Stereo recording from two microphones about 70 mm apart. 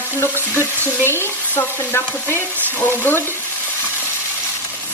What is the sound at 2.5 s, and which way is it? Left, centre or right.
Speech, right.